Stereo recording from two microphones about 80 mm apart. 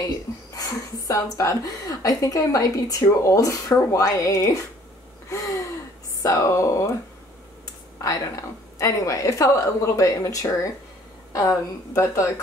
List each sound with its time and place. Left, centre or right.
0.6 s a woman's voice: left
5.3 s gasp: left
6.2 s a woman's voice: left
8.7 s a woman's voice: left